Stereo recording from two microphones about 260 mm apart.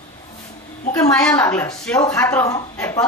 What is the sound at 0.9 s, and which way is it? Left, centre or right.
A woman's voice, centre.